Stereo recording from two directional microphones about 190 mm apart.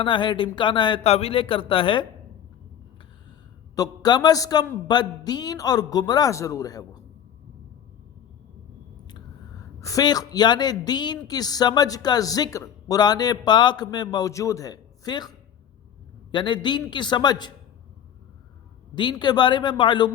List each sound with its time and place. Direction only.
0.0 s a woman's voice: 25° left (ahead or behind)
3.8 s a woman's voice: 20° left (ahead or behind)
9.8 s a woman's voice: 20° left (ahead or behind)
18.9 s a woman's voice: 25° left (ahead or behind)